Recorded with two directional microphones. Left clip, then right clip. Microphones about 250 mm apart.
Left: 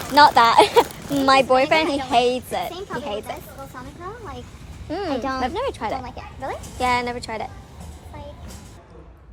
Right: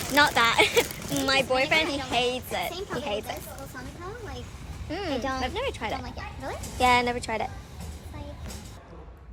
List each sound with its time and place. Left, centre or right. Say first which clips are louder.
0.1 s speech: left 8 dB; centre
4.9 s speech: left 5 dB; centre
5.9 s speech: left 5 dB; left
6.7 s a woman's voice: even; centre